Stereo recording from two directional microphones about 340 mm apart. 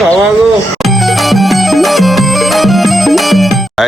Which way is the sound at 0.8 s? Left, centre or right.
Centre.